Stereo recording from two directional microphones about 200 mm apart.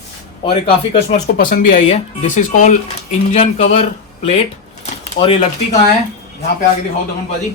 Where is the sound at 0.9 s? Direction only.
40° left (ahead or behind).